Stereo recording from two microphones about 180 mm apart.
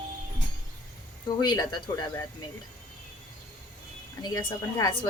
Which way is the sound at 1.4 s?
25° left (ahead or behind).